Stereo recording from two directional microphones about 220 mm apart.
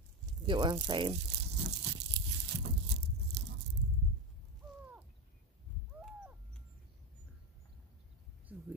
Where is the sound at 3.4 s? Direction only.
50° right (ahead or behind).